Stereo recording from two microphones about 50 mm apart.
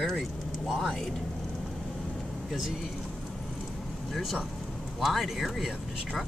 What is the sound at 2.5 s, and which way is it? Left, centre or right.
Speech, centre.